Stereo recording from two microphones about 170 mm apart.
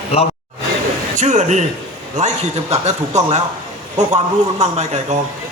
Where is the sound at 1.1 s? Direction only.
45° right (ahead or behind).